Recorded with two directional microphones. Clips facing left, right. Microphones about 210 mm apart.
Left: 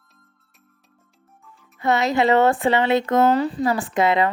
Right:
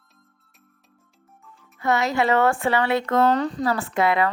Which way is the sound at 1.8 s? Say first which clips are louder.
Left 2 dB; 20° left (ahead or behind).